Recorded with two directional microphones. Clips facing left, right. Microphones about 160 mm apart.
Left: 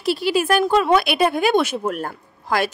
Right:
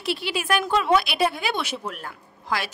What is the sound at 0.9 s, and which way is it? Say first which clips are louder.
Speech: left 4 dB; 55° left (ahead or behind).